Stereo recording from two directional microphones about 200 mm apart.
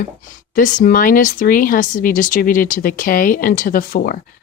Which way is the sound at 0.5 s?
40° left (ahead or behind).